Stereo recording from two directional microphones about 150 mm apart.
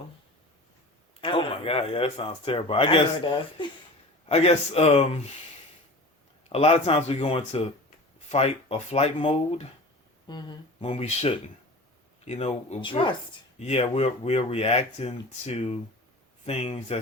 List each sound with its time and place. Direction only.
1.2 s speech: 35° left (ahead or behind)
6.5 s speech: 45° left (ahead or behind)
10.2 s speech: 30° left (ahead or behind)
10.8 s speech: 45° left (ahead or behind)
12.8 s speech: 35° left (ahead or behind)
13.6 s speech: 45° left (ahead or behind)